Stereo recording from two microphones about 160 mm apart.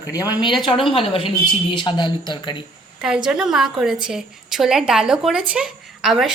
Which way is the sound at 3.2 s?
5° right (ahead or behind).